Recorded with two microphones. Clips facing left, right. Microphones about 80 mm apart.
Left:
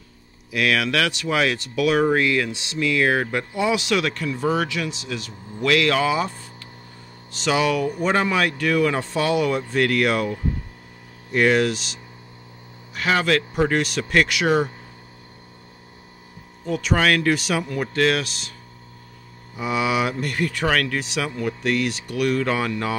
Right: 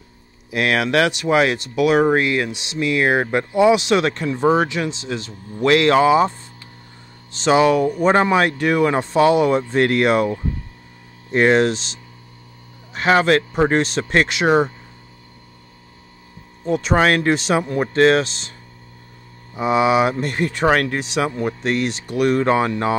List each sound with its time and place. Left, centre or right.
0.5 s speech: right
7.4 s speech: right
12.9 s speech: right
16.6 s speech: right
19.5 s speech: right